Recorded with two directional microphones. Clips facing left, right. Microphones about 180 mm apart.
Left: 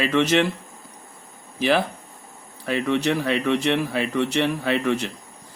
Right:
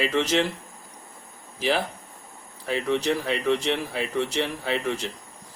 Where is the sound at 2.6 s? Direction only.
65° left (ahead or behind).